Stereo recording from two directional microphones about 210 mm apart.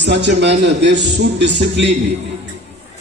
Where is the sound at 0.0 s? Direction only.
55° right (ahead or behind).